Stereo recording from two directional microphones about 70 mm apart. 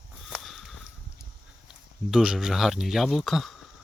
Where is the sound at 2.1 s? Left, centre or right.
Centre.